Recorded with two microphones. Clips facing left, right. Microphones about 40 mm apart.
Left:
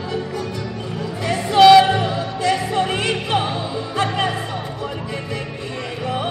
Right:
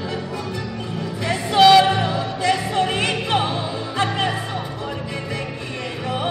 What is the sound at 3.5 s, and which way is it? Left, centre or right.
Music, right.